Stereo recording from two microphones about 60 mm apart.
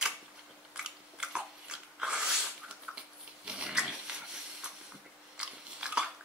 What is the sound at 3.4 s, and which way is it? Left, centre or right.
Pig, centre.